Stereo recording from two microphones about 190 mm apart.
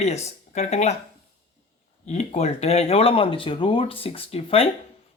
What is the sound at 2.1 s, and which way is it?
Speech, 35° left (ahead or behind).